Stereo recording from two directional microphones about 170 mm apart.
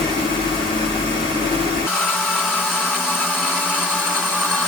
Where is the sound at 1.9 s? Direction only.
5° left (ahead or behind).